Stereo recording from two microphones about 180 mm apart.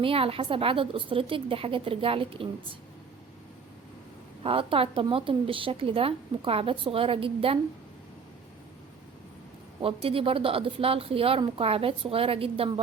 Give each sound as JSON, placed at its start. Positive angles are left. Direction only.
{"t": 0.0, "sound": "a woman's voice", "side_deg": -30}
{"t": 4.4, "sound": "a woman's voice", "side_deg": -30}
{"t": 9.8, "sound": "a woman's voice", "side_deg": -30}